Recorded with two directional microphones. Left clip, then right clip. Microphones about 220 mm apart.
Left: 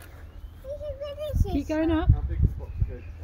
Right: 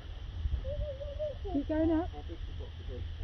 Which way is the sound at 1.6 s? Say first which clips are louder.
Left 5 dB; 60° left (ahead or behind).